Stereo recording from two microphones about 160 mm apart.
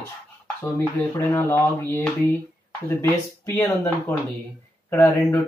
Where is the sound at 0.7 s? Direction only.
15° left (ahead or behind).